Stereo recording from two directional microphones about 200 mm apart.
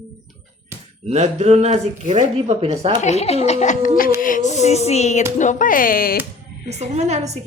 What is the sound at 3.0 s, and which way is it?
Speech, 30° left (ahead or behind).